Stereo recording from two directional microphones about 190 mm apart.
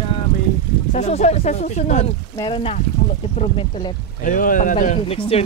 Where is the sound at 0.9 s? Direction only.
35° left (ahead or behind).